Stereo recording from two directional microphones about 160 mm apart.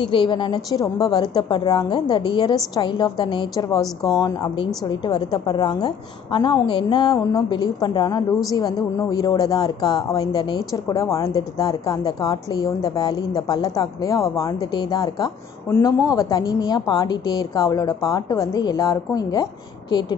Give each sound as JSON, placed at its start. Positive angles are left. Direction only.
{"t": 0.0, "sound": "a woman's voice", "side_deg": 30}